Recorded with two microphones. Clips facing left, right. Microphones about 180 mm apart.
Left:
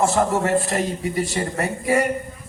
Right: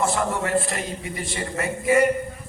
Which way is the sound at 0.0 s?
40° left (ahead or behind).